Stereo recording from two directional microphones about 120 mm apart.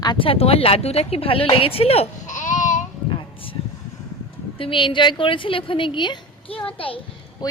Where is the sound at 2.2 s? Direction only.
90° left.